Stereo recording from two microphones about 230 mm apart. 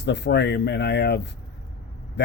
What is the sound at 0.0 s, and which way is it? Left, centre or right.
Speech, left.